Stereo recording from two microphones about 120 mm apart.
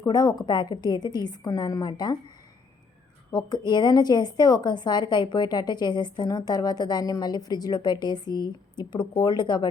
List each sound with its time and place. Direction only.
0.0 s a woman's voice: 35° left (ahead or behind)
3.3 s a woman's voice: 35° left (ahead or behind)